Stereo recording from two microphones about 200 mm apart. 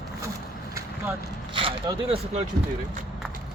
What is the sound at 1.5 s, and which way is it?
Speech, 25° right (ahead or behind).